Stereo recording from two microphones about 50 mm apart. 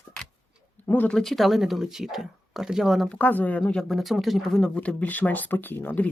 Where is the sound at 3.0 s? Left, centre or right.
Left.